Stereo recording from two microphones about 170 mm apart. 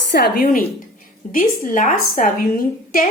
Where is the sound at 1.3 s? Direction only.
50° left (ahead or behind).